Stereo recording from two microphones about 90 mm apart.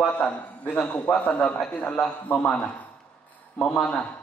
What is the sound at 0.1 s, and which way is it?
A man's voice, 15° left (ahead or behind).